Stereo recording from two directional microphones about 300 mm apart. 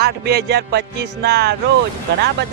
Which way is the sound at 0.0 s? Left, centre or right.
Right.